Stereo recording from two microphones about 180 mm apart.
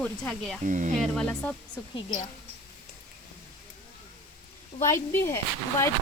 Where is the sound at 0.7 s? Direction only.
45° right (ahead or behind).